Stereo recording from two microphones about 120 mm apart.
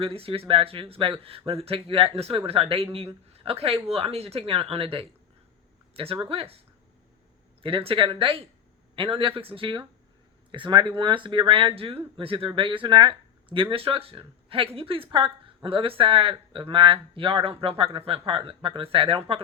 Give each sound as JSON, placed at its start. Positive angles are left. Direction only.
{"t": 0.0, "sound": "speech", "side_deg": -50}
{"t": 7.6, "sound": "speech", "side_deg": -50}